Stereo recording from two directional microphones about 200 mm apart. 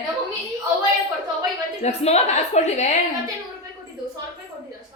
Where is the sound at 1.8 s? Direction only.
35° left (ahead or behind).